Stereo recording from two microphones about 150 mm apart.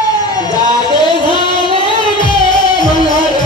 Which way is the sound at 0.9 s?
30° left (ahead or behind).